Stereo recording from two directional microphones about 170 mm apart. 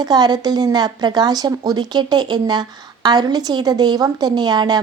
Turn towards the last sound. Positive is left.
turn(degrees=-25)  # may be behind; listen again after turning